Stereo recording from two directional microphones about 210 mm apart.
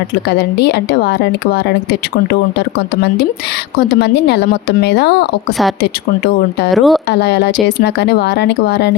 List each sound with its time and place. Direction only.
0.3 s speech: 50° left (ahead or behind)
6.7 s a woman's voice: centre (ahead or behind)
7.1 s speech: 55° left (ahead or behind)